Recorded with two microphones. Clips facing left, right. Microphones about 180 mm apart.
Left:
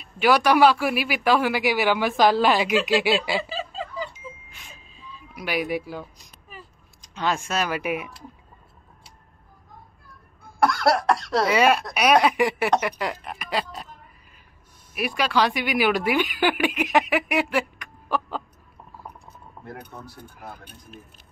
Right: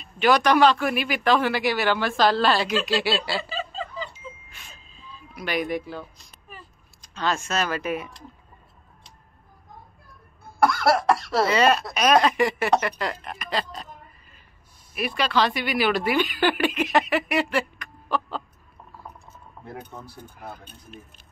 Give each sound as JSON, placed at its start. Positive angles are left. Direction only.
{"t": 0.0, "sound": "speech", "side_deg": 10}
{"t": 5.3, "sound": "speech", "side_deg": 10}
{"t": 10.6, "sound": "cough", "side_deg": 0}
{"t": 11.4, "sound": "speech", "side_deg": 10}
{"t": 15.0, "sound": "speech", "side_deg": 10}
{"t": 20.0, "sound": "speech", "side_deg": 10}